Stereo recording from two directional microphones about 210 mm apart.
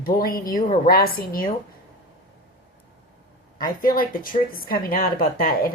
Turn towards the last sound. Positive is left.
turn(degrees=45)  # may be behind; listen again after turning